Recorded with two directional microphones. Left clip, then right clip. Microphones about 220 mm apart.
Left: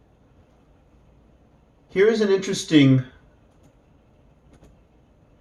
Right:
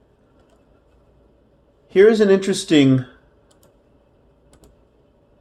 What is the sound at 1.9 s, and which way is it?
Speech, 40° right (ahead or behind).